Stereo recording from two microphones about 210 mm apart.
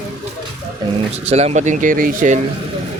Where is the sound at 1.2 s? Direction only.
30° right (ahead or behind).